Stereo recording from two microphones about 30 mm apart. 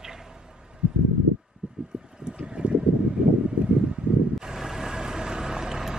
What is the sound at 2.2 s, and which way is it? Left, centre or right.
Boat, right.